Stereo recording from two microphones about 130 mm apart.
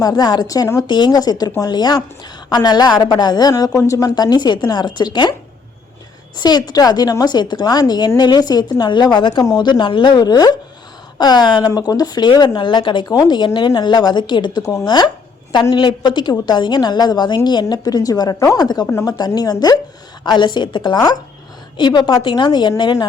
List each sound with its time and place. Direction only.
0.0 s a woman's voice: 30° left (ahead or behind)
6.3 s a woman's voice: 35° left (ahead or behind)